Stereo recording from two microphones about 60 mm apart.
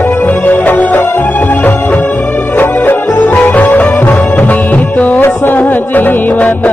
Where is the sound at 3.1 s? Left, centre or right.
Left.